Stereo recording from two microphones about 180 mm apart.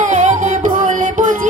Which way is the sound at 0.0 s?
40° right (ahead or behind).